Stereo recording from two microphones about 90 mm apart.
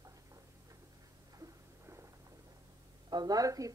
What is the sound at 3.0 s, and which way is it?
Speech, 50° right (ahead or behind).